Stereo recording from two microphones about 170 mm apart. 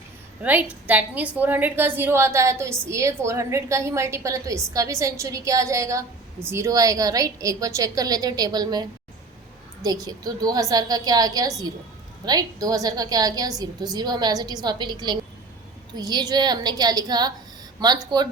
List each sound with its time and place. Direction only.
0.4 s a woman's voice: 10° right (ahead or behind)